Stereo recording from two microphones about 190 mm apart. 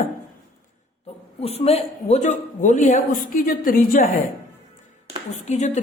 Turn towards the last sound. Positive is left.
turn(degrees=35)  # may be behind; listen again after turning